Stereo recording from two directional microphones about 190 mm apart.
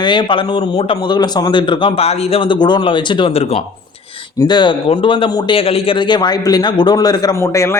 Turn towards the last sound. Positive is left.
turn(degrees=15)  # may be behind; listen again after turning